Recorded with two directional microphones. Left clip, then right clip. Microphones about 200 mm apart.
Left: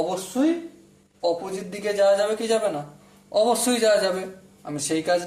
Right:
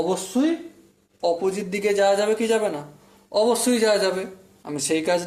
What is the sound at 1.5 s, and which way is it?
Speech, 30° right (ahead or behind).